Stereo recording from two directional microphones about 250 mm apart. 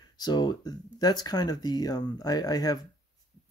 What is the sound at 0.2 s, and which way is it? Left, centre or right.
Speech, centre.